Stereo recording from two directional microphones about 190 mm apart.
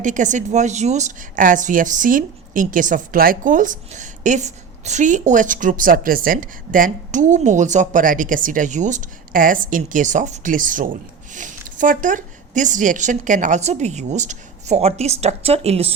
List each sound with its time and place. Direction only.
0.0 s a woman's voice: 40° right (ahead or behind)